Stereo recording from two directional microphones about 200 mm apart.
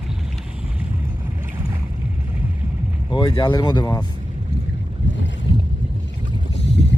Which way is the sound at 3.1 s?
25° left (ahead or behind).